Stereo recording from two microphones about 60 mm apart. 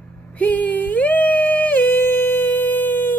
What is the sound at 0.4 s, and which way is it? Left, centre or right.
Music, left.